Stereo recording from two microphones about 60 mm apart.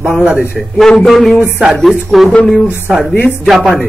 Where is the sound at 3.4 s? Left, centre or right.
Centre.